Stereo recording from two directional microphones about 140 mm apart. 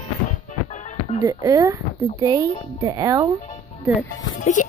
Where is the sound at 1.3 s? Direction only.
25° right (ahead or behind).